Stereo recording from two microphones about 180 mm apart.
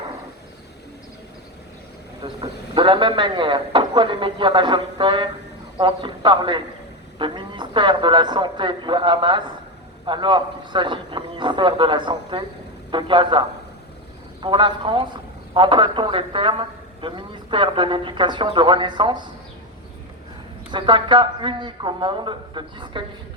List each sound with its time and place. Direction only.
2.2 s a man's voice: 25° right (ahead or behind)
14.4 s a man's voice: 25° right (ahead or behind)
20.7 s a man's voice: 25° right (ahead or behind)